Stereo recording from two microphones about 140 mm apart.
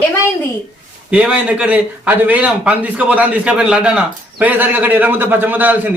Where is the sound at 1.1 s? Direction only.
10° right (ahead or behind).